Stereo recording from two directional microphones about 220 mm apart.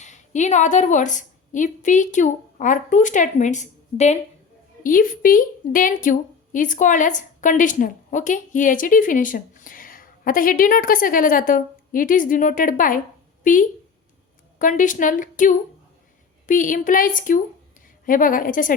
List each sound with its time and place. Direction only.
0.0 s a woman's voice: 30° left (ahead or behind)